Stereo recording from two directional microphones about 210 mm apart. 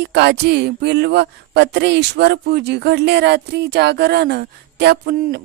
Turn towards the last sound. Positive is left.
turn(degrees=-45)  # may be behind; listen again after turning